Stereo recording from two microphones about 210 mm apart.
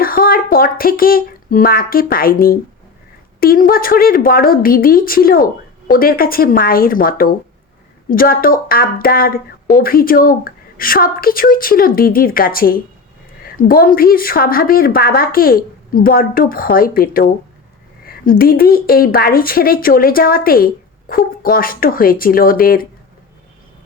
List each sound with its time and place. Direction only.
0.0 s a woman's voice: 45° left (ahead or behind)